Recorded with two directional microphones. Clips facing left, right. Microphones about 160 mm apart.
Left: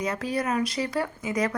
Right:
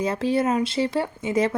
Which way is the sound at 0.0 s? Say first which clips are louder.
Right 6 dB; 30° right (ahead or behind).